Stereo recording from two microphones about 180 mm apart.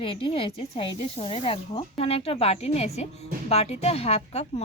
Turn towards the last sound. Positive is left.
turn(degrees=35)  # may be behind; listen again after turning